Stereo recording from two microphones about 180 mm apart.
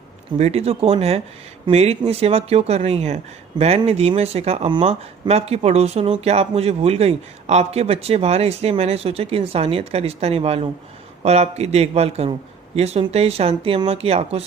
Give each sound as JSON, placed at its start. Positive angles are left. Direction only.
{"t": 0.3, "sound": "speech", "side_deg": -35}